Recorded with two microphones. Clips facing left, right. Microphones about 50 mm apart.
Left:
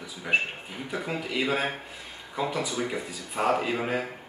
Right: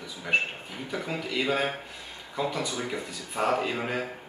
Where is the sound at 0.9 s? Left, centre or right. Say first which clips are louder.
Left 1 dB; centre.